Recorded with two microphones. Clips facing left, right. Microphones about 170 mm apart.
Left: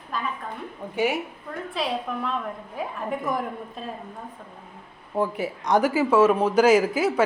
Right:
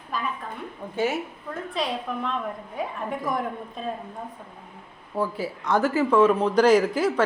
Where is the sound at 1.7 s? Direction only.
Centre (ahead or behind).